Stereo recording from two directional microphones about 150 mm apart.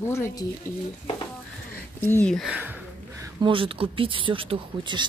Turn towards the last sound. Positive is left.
turn(degrees=-35)  # may be behind; listen again after turning